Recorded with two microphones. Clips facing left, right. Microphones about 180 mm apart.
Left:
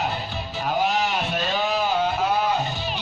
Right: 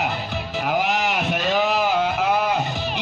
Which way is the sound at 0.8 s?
75° right (ahead or behind).